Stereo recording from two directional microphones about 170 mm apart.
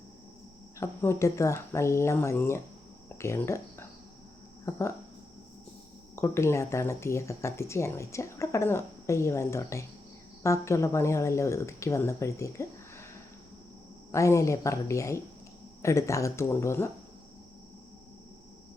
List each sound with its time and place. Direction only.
0.8 s speech: 15° left (ahead or behind)
6.1 s speech: 15° left (ahead or behind)
14.1 s speech: 15° left (ahead or behind)